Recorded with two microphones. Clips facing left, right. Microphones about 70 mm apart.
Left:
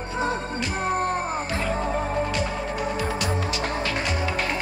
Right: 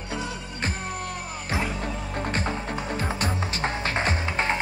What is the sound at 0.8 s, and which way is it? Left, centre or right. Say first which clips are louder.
Music: left 9 dB; left.